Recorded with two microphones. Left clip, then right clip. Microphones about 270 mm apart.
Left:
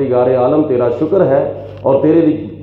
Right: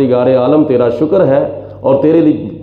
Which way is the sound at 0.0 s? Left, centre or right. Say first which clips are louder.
Right 2 dB; right.